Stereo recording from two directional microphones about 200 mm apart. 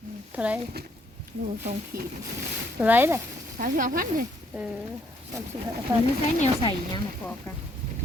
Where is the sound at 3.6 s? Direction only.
45° right (ahead or behind).